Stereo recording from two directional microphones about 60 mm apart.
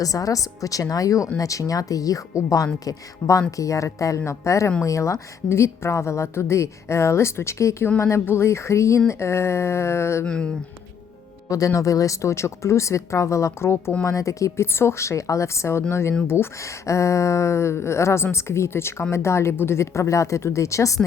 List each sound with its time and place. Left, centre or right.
0.0 s a woman's voice: left
10.2 s speech: centre
11.4 s speech: left
14.0 s a woman's voice: left
16.8 s a woman's voice: left